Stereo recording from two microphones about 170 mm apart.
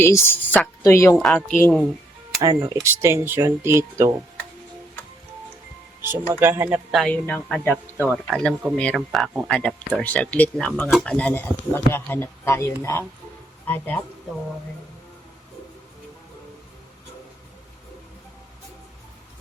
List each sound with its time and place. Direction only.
0.0 s speech: 15° left (ahead or behind)
1.1 s speech: 5° left (ahead or behind)
1.5 s speech: 10° left (ahead or behind)
2.4 s speech: 15° right (ahead or behind)
6.4 s speech: 15° right (ahead or behind)
7.0 s speech: 10° left (ahead or behind)